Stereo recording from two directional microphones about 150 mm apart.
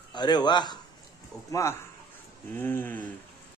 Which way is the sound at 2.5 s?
10° left (ahead or behind).